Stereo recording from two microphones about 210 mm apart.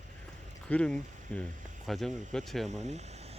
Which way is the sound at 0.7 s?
5° left (ahead or behind).